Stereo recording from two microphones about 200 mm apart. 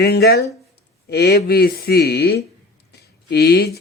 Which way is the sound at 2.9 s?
55° left (ahead or behind).